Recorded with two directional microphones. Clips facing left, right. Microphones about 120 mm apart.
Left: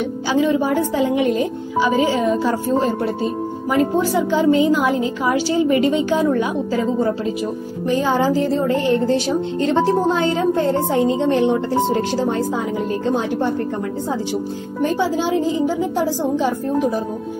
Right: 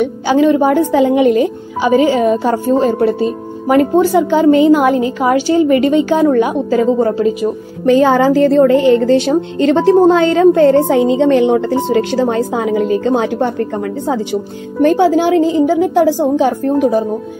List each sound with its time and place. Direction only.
0.3 s a woman's voice: 65° right (ahead or behind); by 3.1 s 80° right
4.3 s a woman's voice: 70° right (ahead or behind)
7.8 s a woman's voice: 80° right
14.8 s a woman's voice: 70° right (ahead or behind)